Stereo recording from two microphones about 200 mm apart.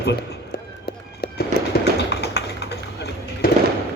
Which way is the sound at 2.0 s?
55° left (ahead or behind).